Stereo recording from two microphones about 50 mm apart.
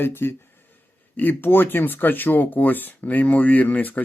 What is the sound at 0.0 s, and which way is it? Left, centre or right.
Speech, left.